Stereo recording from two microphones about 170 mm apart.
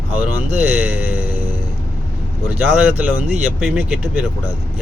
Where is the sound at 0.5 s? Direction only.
10° right (ahead or behind).